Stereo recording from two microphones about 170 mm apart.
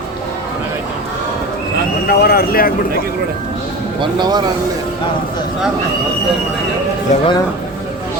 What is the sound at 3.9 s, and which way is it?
Speech, 25° right (ahead or behind).